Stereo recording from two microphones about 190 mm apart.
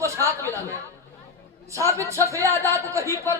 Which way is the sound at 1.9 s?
15° right (ahead or behind).